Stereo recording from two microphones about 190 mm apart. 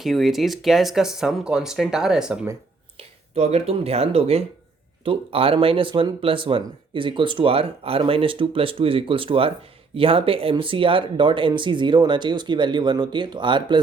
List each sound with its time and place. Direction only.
0.0 s speech: centre (ahead or behind)
3.0 s speech: 35° right (ahead or behind)